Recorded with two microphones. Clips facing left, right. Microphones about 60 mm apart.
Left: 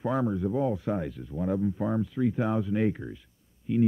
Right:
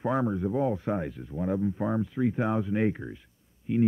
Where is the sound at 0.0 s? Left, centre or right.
Right.